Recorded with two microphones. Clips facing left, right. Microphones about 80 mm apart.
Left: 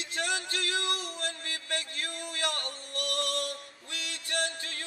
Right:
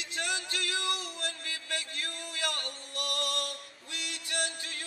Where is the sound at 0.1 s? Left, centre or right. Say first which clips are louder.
Left 2 dB; left.